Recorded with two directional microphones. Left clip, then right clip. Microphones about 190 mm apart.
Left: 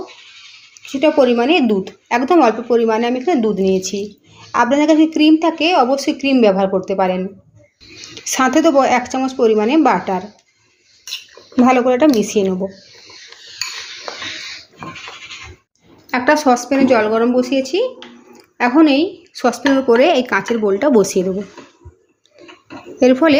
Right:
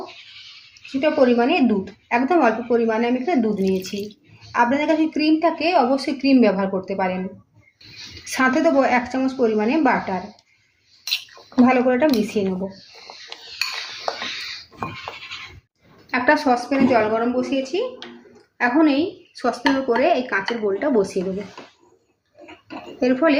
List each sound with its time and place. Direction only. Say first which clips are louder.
0.7 s a woman's voice: left 6 dB; 50° left (ahead or behind)
8.3 s a woman's voice: left 5 dB; 40° left (ahead or behind)
11.5 s a woman's voice: left 4 dB; 45° left (ahead or behind)
16.1 s a woman's voice: left 4 dB; 50° left (ahead or behind)
23.0 s a woman's voice: left 7 dB; 55° left (ahead or behind)